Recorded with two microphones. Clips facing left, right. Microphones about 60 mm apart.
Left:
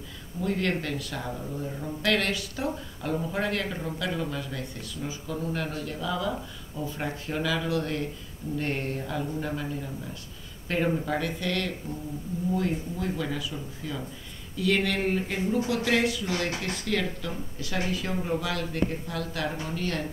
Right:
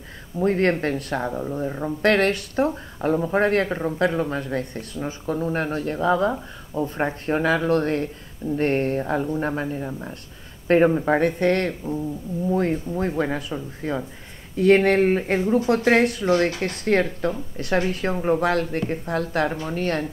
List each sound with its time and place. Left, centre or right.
0.4 s speech: right
2.7 s speech: right